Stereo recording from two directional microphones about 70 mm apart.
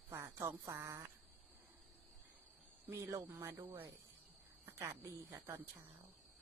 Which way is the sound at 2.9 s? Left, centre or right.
Right.